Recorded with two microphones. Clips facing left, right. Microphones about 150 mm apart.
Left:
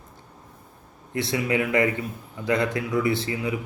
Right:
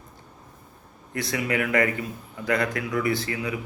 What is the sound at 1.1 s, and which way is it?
A man's voice, 25° left (ahead or behind).